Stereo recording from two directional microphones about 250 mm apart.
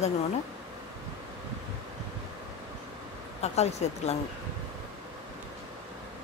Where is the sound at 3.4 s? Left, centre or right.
Left.